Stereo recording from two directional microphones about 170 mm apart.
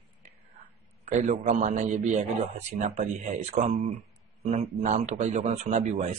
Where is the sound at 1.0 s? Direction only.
45° right (ahead or behind).